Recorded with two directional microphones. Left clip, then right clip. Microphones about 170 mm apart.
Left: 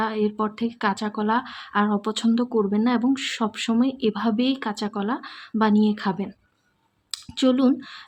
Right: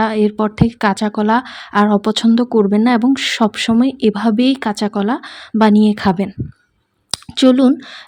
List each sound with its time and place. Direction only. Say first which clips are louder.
0.0 s a woman's voice: right 9 dB; 40° right (ahead or behind)